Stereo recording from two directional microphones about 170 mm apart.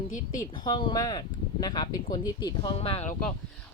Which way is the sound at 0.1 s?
50° left (ahead or behind).